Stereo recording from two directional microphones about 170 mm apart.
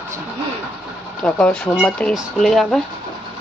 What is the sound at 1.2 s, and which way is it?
Speech, 5° left (ahead or behind).